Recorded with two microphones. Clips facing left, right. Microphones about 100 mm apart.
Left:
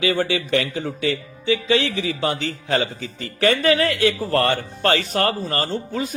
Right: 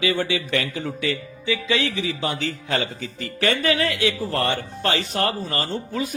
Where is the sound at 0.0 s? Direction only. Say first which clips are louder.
Left 2 dB; 40° left (ahead or behind).